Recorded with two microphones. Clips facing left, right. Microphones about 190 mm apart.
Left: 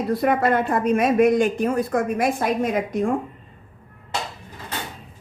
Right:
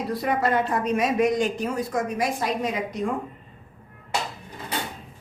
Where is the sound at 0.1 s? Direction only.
55° left (ahead or behind).